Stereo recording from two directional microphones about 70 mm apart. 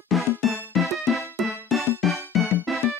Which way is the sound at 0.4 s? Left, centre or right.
Centre.